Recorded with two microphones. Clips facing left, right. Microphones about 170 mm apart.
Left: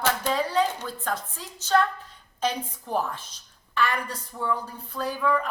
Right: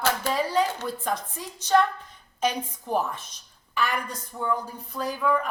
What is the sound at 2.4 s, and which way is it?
Speech, 10° right (ahead or behind).